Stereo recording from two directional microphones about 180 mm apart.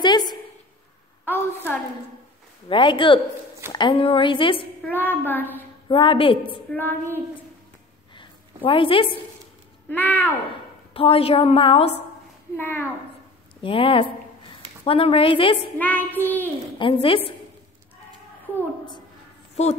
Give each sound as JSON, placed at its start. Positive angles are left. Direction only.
{"t": 0.0, "sound": "a sound", "side_deg": 25}
{"t": 1.2, "sound": "a sound", "side_deg": 10}
{"t": 2.7, "sound": "a woman's voice", "side_deg": 30}
{"t": 4.8, "sound": "a child's voice", "side_deg": 10}
{"t": 5.9, "sound": "a woman's voice", "side_deg": 30}
{"t": 6.7, "sound": "a child's voice", "side_deg": 10}
{"t": 8.6, "sound": "a woman's voice", "side_deg": 30}
{"t": 9.8, "sound": "a child's voice", "side_deg": 10}
{"t": 10.9, "sound": "a woman's voice", "side_deg": 30}
{"t": 12.5, "sound": "a child's voice", "side_deg": 10}
{"t": 13.6, "sound": "a woman's voice", "side_deg": 30}
{"t": 15.8, "sound": "a child's voice", "side_deg": 10}
{"t": 16.7, "sound": "a woman's voice", "side_deg": 30}
{"t": 19.5, "sound": "speech", "side_deg": 40}